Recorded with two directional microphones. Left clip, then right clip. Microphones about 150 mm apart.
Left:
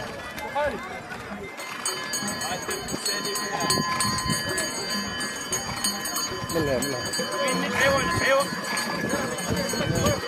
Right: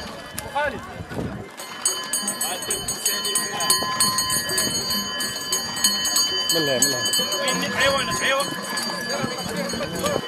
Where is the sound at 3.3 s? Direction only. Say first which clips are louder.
Right 2 dB; 35° right (ahead or behind).